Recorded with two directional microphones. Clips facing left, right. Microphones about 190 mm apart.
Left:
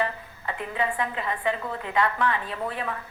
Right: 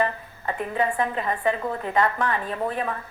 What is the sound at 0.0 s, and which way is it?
A woman's voice, 45° right (ahead or behind).